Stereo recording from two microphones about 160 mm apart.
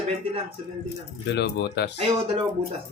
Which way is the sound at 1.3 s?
90° left.